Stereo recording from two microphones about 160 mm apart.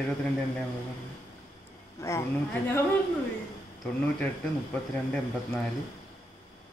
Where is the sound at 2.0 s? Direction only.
15° left (ahead or behind).